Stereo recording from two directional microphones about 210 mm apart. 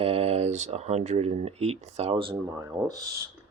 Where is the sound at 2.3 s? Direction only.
10° right (ahead or behind).